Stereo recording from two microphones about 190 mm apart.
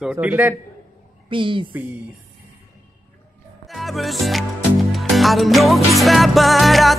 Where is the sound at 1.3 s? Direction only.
25° right (ahead or behind).